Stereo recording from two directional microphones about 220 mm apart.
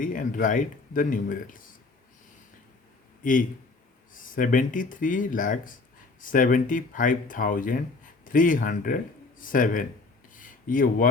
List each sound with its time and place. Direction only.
0.0 s speech: 35° left (ahead or behind)
4.1 s speech: 40° left (ahead or behind)
10.3 s a sound: 40° left (ahead or behind)